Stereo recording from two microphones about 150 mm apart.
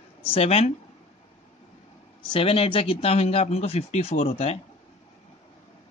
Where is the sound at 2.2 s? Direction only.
35° left (ahead or behind).